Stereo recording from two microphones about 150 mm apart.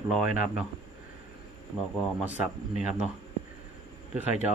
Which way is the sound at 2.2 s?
10° right (ahead or behind).